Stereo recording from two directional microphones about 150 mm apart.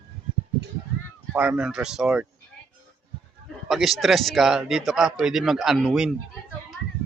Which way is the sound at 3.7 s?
Centre (ahead or behind).